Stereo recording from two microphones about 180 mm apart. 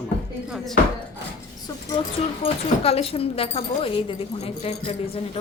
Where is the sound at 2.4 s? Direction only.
35° left (ahead or behind).